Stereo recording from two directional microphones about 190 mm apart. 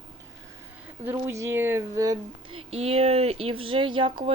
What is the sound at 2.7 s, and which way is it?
Speech, 35° right (ahead or behind).